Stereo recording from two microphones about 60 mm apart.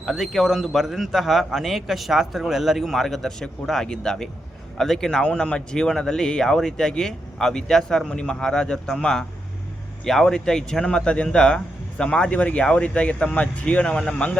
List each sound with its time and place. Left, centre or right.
0.0 s a man's voice: centre; by 13.9 s left
13.9 s speech: centre